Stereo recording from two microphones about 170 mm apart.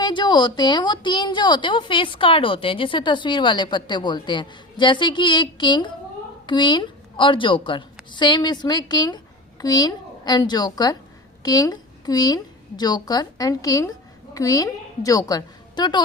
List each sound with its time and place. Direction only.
0.0 s a woman's voice: 30° left (ahead or behind)